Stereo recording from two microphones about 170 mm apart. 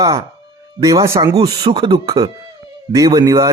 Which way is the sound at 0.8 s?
20° right (ahead or behind).